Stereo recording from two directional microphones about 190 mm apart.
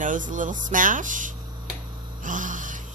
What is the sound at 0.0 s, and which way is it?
A woman's voice, 45° right (ahead or behind).